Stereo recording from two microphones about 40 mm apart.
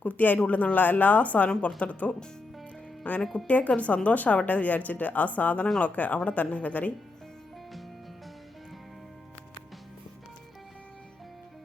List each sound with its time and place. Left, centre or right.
0.0 s speech: left